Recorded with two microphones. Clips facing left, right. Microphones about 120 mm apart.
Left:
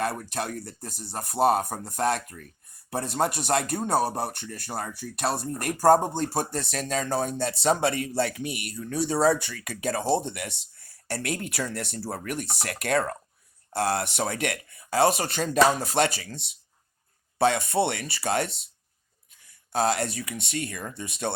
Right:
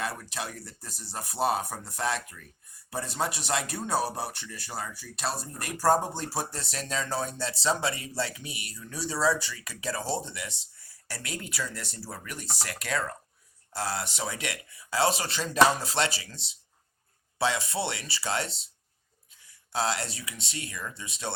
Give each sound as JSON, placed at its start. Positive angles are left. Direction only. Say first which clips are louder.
{"t": 0.0, "sound": "speech", "louder": "left 5 dB", "side_deg": 50}
{"t": 19.7, "sound": "speech", "louder": "left 5 dB", "side_deg": 50}